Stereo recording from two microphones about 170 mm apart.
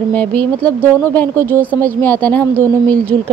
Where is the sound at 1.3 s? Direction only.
15° right (ahead or behind).